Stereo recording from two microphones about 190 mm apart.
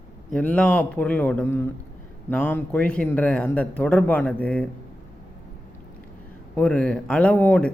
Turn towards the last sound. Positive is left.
turn(degrees=10)  # may be behind; listen again after turning